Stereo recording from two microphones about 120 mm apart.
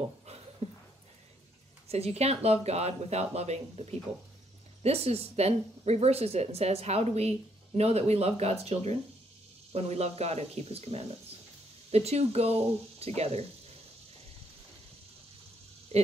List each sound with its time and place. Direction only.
0.6 s a sound: 60° right (ahead or behind)
1.9 s speech: 60° right (ahead or behind)
15.9 s speech: 55° right (ahead or behind)